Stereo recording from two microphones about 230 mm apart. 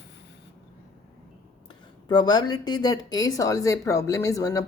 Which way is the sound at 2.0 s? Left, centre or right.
Centre.